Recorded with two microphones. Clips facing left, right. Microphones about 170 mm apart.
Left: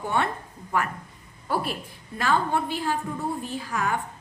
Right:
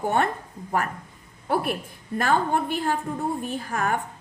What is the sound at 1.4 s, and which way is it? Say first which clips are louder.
A woman's voice: right 3 dB; 55° right (ahead or behind).